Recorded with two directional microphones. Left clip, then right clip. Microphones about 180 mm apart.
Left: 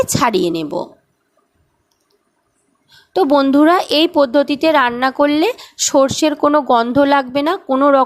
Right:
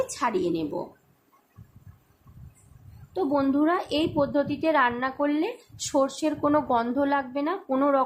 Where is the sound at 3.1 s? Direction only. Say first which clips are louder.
Left 12 dB; 50° left (ahead or behind).